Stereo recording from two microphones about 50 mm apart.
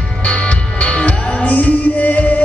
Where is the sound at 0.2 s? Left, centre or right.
Left.